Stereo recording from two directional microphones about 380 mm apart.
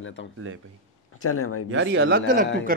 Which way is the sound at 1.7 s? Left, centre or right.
Right.